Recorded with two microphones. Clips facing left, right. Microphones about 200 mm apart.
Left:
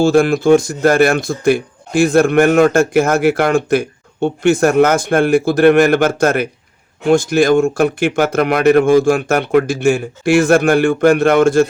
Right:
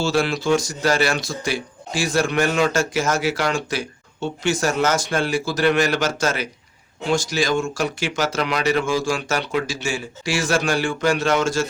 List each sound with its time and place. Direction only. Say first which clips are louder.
0.0 s speech: left 9 dB; 50° left (ahead or behind)